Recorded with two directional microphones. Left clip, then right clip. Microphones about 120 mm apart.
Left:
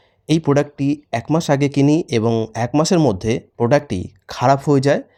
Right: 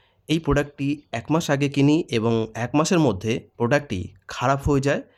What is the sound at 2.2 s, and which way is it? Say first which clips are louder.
Speech: left 4 dB; 10° left (ahead or behind).